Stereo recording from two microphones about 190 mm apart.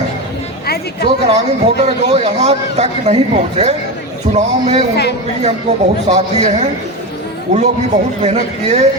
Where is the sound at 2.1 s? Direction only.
35° right (ahead or behind).